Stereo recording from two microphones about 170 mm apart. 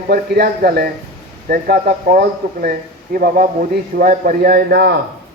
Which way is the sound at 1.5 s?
55° right (ahead or behind).